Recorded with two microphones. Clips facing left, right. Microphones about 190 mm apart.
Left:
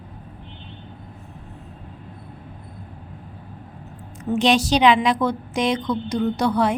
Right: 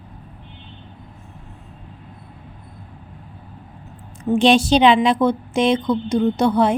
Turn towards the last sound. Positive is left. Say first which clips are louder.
# right 4 dB
turn(degrees=-25)  # may be behind; listen again after turning